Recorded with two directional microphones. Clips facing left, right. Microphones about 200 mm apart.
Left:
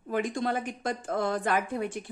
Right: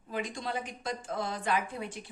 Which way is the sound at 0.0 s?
50° left (ahead or behind).